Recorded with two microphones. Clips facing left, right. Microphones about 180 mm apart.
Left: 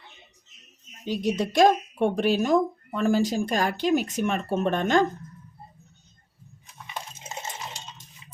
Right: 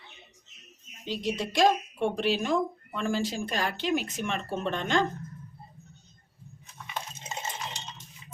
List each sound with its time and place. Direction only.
1.0 s a woman's voice: 45° left (ahead or behind)